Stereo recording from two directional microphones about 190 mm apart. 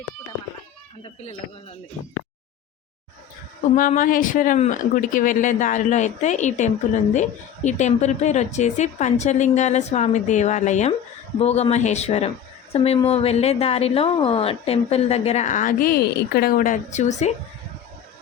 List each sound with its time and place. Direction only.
3.8 s a woman's voice: 45° left (ahead or behind)